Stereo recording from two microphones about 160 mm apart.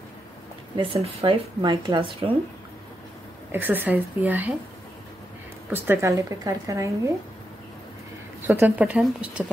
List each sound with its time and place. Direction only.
0.7 s speech: 30° right (ahead or behind)
3.5 s speech: 10° right (ahead or behind)
5.7 s speech: 15° right (ahead or behind)
8.4 s speech: 10° right (ahead or behind)